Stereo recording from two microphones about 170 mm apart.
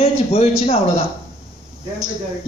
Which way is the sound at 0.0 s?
35° left (ahead or behind).